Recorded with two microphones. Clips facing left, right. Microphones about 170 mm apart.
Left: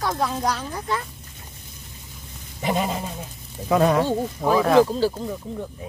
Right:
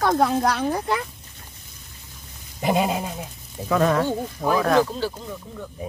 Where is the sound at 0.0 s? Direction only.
60° right (ahead or behind).